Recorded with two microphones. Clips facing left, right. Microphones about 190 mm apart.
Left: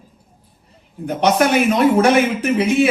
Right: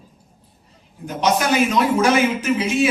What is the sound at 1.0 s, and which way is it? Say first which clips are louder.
A man's voice: left 4 dB; 60° left (ahead or behind).